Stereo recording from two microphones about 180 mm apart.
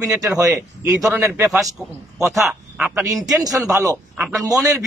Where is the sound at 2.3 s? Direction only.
5° right (ahead or behind); by 4.8 s 20° right (ahead or behind).